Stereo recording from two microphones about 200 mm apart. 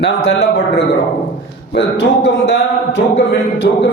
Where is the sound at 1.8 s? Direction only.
60° left (ahead or behind).